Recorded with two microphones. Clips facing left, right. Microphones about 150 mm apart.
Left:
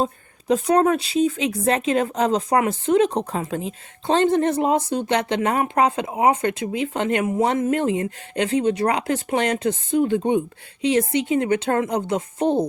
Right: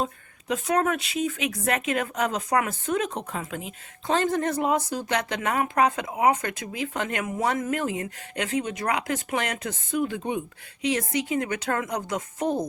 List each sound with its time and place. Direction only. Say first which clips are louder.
0.0 s speech: left 5 dB; 30° left (ahead or behind)